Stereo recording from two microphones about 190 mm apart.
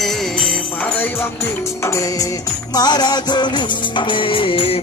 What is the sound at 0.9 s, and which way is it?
Music, 10° left (ahead or behind).